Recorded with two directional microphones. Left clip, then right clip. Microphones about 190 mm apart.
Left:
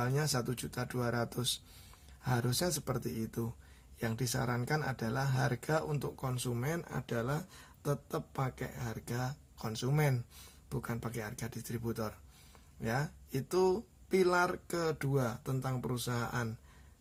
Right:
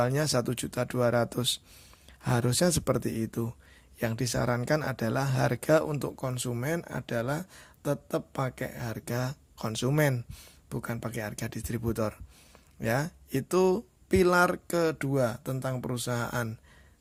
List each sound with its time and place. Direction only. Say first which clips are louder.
0.0 s speech: right 8 dB; 40° right (ahead or behind)